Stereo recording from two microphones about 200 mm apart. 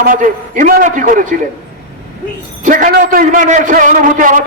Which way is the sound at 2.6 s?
45° right (ahead or behind).